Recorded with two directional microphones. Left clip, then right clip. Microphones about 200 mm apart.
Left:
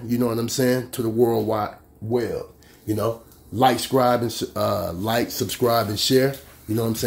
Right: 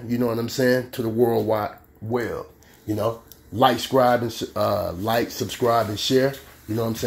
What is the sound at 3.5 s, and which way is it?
Speech, 10° left (ahead or behind).